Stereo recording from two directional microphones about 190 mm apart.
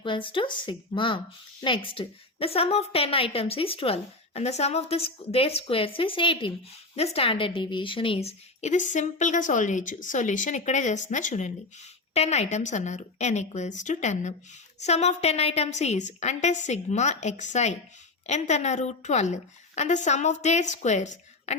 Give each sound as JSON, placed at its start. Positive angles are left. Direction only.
{"t": 0.0, "sound": "a woman's voice", "side_deg": 25}